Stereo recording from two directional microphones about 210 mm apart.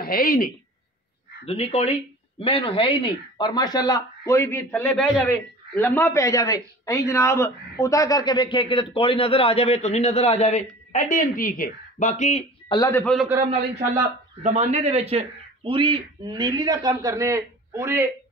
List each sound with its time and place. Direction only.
0.0 s speech: 45° left (ahead or behind)
1.4 s speech: 30° left (ahead or behind)
12.7 s speech: 20° left (ahead or behind)
13.0 s a man's voice: centre (ahead or behind)
14.4 s a man's voice: 30° right (ahead or behind); by 18.0 s 15° right (ahead or behind)